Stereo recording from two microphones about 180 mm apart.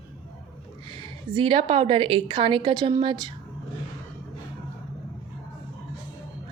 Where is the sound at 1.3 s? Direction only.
30° right (ahead or behind).